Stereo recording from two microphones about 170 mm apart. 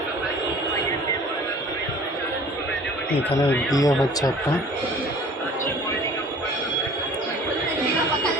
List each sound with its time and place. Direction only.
3.2 s speech: 10° left (ahead or behind)
3.8 s speech: 20° left (ahead or behind)